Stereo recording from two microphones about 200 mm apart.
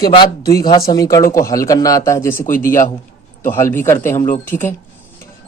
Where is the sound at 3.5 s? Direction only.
10° left (ahead or behind).